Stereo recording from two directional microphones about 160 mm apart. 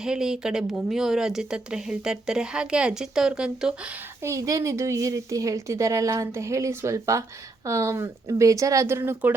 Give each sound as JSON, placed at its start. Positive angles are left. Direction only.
{"t": 0.0, "sound": "speech", "side_deg": -5}
{"t": 4.2, "sound": "a woman's voice", "side_deg": -20}